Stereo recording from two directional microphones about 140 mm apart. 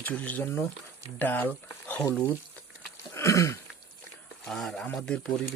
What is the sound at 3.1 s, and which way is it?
Throat clearing, 20° left (ahead or behind).